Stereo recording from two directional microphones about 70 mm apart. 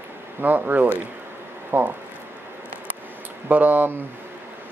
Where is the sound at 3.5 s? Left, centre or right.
Right.